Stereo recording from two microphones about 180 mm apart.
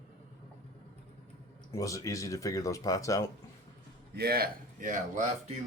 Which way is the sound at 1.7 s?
20° left (ahead or behind).